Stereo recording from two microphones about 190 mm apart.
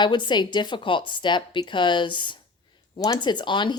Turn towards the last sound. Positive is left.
turn(degrees=25)  # may be behind; listen again after turning